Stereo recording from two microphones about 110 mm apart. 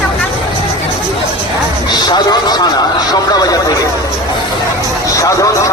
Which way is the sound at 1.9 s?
40° left (ahead or behind).